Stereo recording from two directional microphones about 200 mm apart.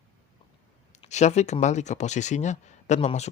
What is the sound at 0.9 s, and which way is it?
Speech, 35° left (ahead or behind).